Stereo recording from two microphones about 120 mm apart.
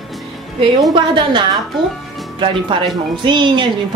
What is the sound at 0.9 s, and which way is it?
A woman's voice, 45° right (ahead or behind).